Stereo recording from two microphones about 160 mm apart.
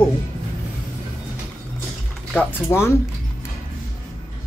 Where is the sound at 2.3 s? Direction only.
15° left (ahead or behind).